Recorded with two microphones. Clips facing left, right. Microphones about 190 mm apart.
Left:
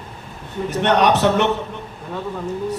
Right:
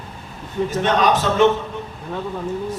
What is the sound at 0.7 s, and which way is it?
Speech, 70° left (ahead or behind).